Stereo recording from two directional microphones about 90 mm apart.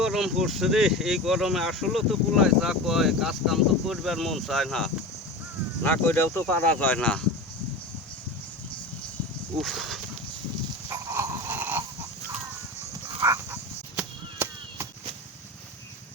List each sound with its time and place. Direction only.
0.0 s speech: 5° right (ahead or behind)
5.8 s speech: 20° left (ahead or behind)
9.6 s speech: centre (ahead or behind)
10.8 s dog: 35° right (ahead or behind)